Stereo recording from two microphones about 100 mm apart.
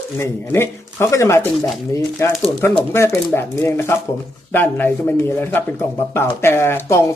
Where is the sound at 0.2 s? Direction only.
25° left (ahead or behind).